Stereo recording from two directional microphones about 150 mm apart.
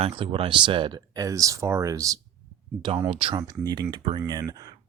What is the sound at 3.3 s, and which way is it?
Speech, 25° right (ahead or behind).